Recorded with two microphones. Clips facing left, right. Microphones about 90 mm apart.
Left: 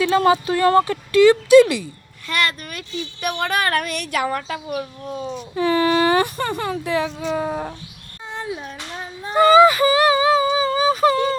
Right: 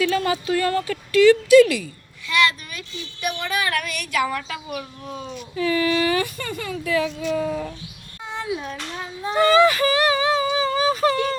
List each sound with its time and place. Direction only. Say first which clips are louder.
0.0 s speech: left 5 dB; 30° left (ahead or behind)
0.9 s speech: left 1 dB; 25° left (ahead or behind)
2.2 s speech: right 2 dB; 45° left (ahead or behind)
6.8 s speech: right 3 dB; 25° left (ahead or behind)
8.4 s a sound: right 1 dB; 35° left (ahead or behind)
9.3 s speech: left 4 dB; 5° left (ahead or behind)
10.5 s a sound: left 2 dB; 5° left (ahead or behind)